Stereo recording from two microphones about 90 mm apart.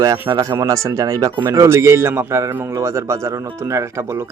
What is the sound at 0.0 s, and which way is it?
Speech, 45° right (ahead or behind).